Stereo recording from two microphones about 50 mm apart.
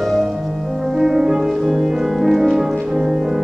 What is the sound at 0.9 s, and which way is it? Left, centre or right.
Music, centre.